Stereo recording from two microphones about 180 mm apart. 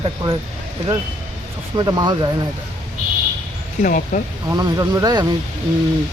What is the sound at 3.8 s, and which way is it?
Speech, 50° left (ahead or behind).